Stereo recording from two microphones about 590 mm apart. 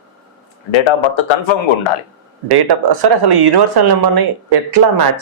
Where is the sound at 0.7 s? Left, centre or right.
Left.